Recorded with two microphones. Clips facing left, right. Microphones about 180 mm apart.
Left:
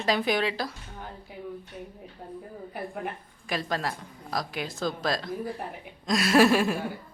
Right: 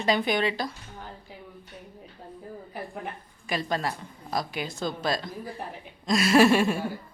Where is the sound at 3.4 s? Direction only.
Centre (ahead or behind).